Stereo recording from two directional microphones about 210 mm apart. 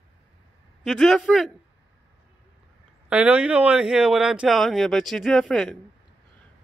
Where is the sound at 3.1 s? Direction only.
5° right (ahead or behind).